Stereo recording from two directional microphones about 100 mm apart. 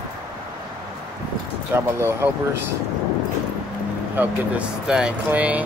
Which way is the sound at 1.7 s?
25° right (ahead or behind).